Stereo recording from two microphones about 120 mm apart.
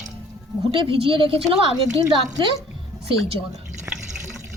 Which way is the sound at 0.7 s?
50° right (ahead or behind).